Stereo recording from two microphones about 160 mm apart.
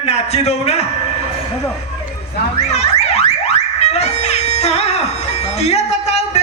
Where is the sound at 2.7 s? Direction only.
40° left (ahead or behind).